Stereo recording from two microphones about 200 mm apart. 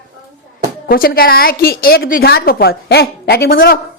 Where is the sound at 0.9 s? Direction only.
50° left (ahead or behind).